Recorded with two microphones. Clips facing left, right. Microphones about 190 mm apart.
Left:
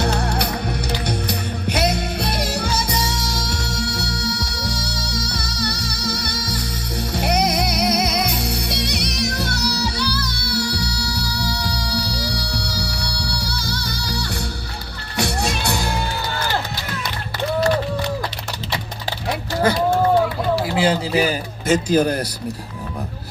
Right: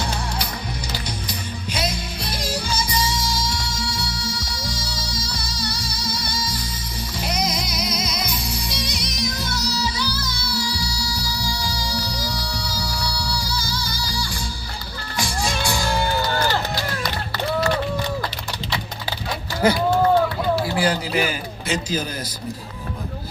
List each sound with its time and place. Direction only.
0.0 s music: 65° left (ahead or behind)
20.7 s a sound: 25° left (ahead or behind)
21.7 s speech: 60° left (ahead or behind)